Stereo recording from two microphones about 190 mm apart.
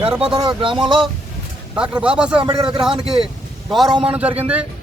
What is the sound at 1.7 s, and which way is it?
Speech, 5° right (ahead or behind).